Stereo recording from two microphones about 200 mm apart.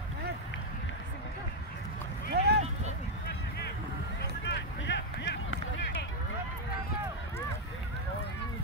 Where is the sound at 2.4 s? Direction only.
55° right (ahead or behind).